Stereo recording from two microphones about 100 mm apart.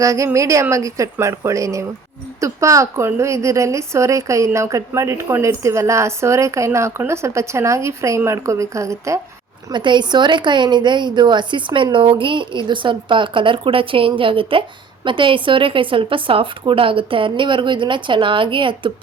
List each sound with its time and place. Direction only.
0.0 s a woman's voice: 30° right (ahead or behind)
9.7 s a woman's voice: 50° right (ahead or behind)